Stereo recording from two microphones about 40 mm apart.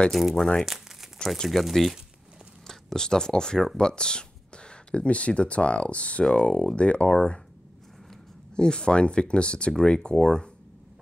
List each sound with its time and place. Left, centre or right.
0.1 s speech: centre
0.7 s crumpling: centre
1.4 s speech: centre
2.6 s speech: centre; by 7.2 s left
8.5 s speech: left